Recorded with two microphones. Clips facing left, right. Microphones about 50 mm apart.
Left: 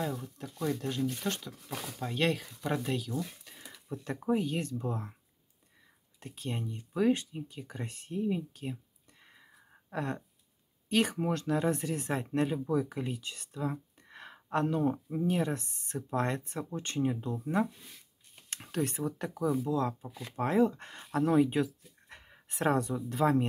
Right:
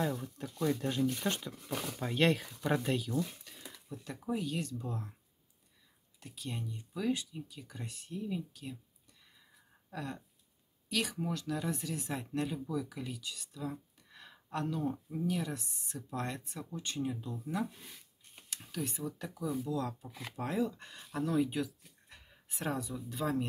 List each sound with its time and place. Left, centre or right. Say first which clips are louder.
0.4 s speech: right 1 dB; centre
2.0 s speech: right 1 dB; centre
3.9 s speech: left 7 dB; left
6.1 s speech: left 4 dB; left
9.2 s a sound: left 6 dB; left
10.9 s speech: left 6 dB; left
18.5 s speech: left 6 dB; left
19.7 s speech: left 5 dB; left